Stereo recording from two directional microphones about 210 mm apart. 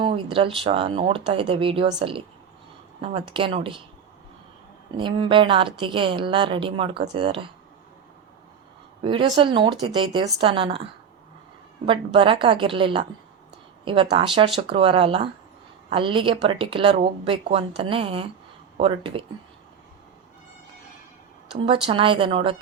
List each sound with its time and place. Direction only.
0.3 s a woman's voice: 25° right (ahead or behind)
4.9 s a woman's voice: 25° right (ahead or behind)
9.0 s a woman's voice: 25° right (ahead or behind)
11.9 s a woman's voice: 25° right (ahead or behind)
21.5 s a woman's voice: 25° right (ahead or behind)